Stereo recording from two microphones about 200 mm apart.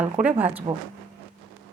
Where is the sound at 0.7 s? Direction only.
30° right (ahead or behind).